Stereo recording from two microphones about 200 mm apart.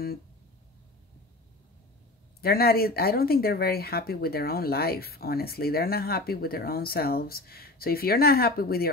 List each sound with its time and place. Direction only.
2.4 s speech: 50° left (ahead or behind)